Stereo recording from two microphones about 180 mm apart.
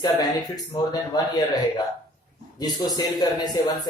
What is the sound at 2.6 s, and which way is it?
Speech, 20° left (ahead or behind).